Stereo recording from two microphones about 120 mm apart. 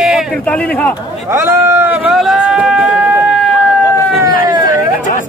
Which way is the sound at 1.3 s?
20° right (ahead or behind).